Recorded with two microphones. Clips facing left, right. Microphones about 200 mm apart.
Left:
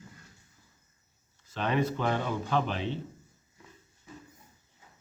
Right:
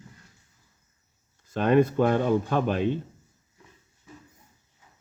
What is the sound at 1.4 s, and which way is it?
Speech, 50° right (ahead or behind).